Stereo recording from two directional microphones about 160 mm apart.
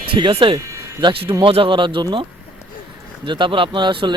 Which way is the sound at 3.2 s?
30° right (ahead or behind).